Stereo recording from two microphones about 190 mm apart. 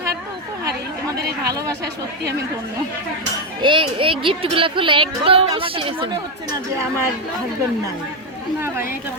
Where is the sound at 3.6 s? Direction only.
25° right (ahead or behind).